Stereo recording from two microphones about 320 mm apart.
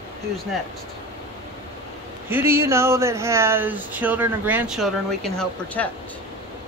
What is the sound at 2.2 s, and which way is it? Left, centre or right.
Speech, centre.